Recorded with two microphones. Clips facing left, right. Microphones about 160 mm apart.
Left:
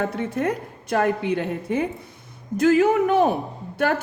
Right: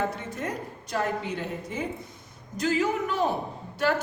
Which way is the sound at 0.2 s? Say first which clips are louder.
Left 9 dB; 60° left (ahead or behind).